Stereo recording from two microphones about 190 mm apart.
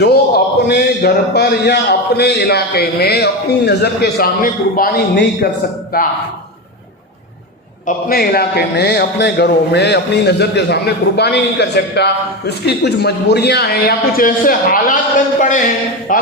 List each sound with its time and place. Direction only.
0.0 s a man's voice: 55° left (ahead or behind)
7.9 s a man's voice: 55° left (ahead or behind)